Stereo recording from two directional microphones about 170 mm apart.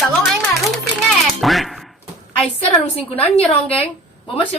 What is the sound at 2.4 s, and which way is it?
A woman's voice, 35° left (ahead or behind).